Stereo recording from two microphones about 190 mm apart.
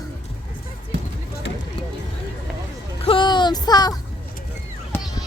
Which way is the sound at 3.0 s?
25° left (ahead or behind).